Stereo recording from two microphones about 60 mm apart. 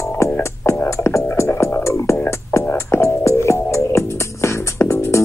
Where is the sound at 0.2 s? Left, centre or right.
Left.